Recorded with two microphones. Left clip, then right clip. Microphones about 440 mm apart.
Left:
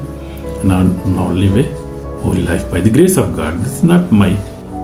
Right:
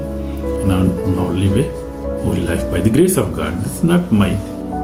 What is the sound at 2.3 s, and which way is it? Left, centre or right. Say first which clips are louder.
Speech: left 5 dB; right.